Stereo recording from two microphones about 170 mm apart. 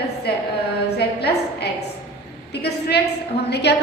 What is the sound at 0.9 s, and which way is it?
Speech, 75° left (ahead or behind).